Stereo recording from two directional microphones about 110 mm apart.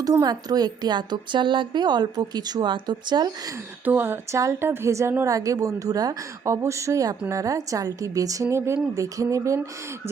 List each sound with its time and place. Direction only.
0.0 s a woman's voice: 35° right (ahead or behind)
3.8 s a woman's voice: 20° right (ahead or behind)